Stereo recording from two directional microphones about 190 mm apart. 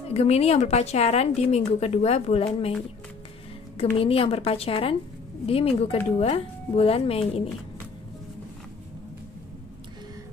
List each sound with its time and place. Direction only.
0.1 s a woman's voice: 35° left (ahead or behind)
3.7 s a woman's voice: 30° left (ahead or behind)